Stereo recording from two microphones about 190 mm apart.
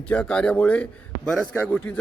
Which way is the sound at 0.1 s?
5° left (ahead or behind).